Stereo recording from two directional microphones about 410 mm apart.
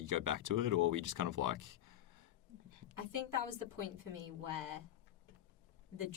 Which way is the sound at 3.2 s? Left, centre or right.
Left.